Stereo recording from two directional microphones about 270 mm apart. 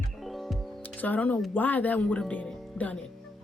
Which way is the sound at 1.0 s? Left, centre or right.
Centre.